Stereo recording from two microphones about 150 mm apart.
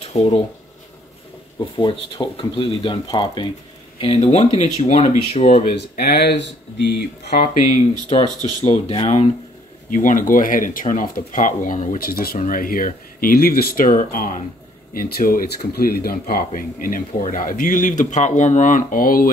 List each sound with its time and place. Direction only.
0.0 s speech: 40° left (ahead or behind)
1.6 s speech: 35° left (ahead or behind)
4.0 s speech: 45° left (ahead or behind)
5.9 s speech: 90° left
7.2 s speech: 55° left (ahead or behind)
8.1 s speech: 35° left (ahead or behind)
9.8 s speech: 60° left (ahead or behind)
12.0 s speech: 80° left
12.4 s speech: 70° left (ahead or behind)
15.0 s speech: 80° left